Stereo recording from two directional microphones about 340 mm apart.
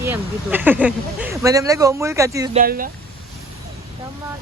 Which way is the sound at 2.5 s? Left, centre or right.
Right.